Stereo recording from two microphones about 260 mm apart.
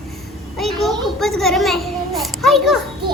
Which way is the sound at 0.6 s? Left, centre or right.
Centre.